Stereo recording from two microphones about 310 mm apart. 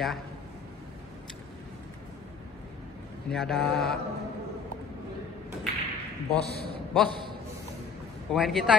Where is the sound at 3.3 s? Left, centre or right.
Centre.